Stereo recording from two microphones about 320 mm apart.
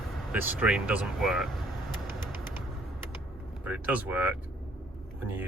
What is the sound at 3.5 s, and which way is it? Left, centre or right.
Speech, centre.